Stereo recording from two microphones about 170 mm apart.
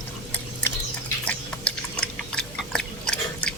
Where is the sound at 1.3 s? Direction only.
5° left (ahead or behind).